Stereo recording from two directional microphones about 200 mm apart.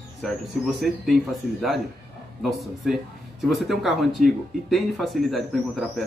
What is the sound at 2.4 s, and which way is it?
Speech, centre (ahead or behind).